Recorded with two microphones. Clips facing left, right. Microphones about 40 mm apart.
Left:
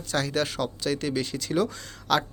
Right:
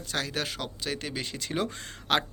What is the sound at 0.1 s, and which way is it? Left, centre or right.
Speech, centre.